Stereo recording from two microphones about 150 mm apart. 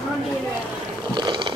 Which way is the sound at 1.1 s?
30° right (ahead or behind).